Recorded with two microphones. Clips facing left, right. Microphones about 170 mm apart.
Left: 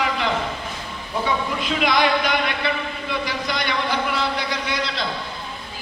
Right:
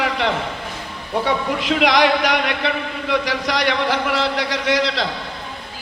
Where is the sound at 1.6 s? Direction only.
90° right.